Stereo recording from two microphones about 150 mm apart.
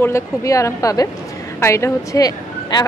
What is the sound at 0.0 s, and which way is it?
Speech, 20° left (ahead or behind).